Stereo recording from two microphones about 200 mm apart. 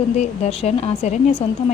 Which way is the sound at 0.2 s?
30° left (ahead or behind).